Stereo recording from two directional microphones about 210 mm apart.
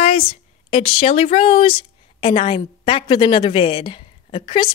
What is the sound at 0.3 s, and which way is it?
Speech, 25° left (ahead or behind).